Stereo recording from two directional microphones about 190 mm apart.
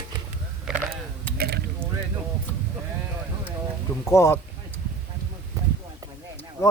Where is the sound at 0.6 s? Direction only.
5° right (ahead or behind).